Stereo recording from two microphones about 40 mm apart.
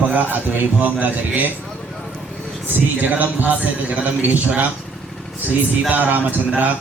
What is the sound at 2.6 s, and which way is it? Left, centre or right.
A man's voice, right.